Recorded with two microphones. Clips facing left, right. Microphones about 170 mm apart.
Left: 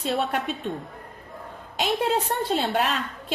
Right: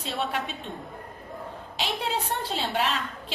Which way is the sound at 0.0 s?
Centre (ahead or behind).